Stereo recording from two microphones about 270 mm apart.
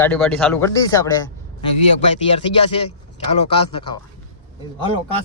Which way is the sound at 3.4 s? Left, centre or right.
Left.